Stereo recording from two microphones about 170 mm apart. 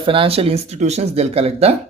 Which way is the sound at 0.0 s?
30° right (ahead or behind).